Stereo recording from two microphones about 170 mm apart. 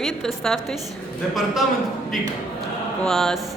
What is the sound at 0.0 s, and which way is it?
Speech, centre (ahead or behind).